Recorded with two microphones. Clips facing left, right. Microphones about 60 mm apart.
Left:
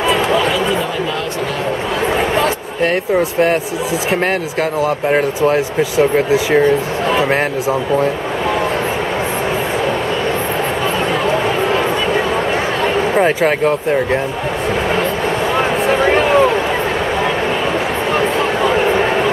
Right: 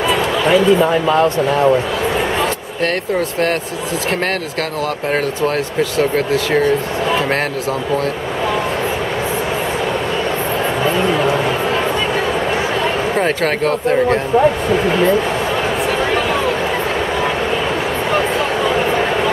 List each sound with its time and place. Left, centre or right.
2.8 s speech: centre
4.8 s speech: centre
13.1 s speech: centre
15.9 s a sound: left